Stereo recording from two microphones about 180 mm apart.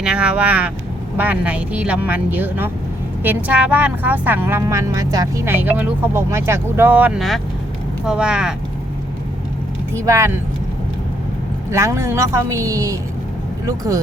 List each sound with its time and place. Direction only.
0.0 s speech: 5° right (ahead or behind)
9.9 s speech: 15° right (ahead or behind)
11.7 s speech: 15° right (ahead or behind)